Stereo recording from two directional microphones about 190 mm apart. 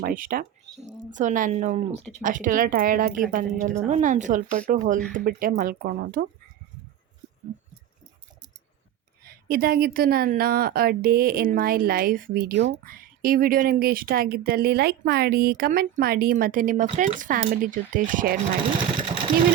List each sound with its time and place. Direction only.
0.0 s a woman's voice: 45° right (ahead or behind)
9.2 s a woman's voice: 50° right (ahead or behind)